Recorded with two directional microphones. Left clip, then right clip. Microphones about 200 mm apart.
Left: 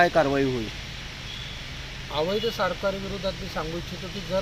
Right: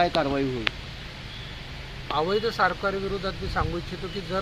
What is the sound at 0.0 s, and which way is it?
Speech, 50° left (ahead or behind).